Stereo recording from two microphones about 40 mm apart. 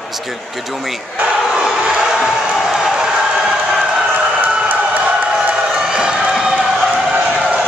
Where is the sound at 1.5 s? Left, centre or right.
Centre.